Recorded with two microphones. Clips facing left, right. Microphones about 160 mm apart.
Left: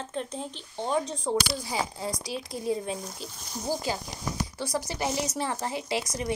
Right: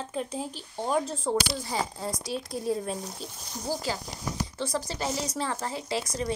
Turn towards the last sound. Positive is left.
turn(degrees=15)  # may be behind; listen again after turning